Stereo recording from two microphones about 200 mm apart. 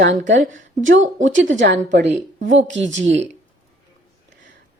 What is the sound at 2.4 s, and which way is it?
Speech, 40° right (ahead or behind).